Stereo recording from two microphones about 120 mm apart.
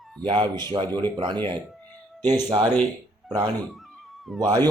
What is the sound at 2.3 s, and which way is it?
Speech, 40° right (ahead or behind).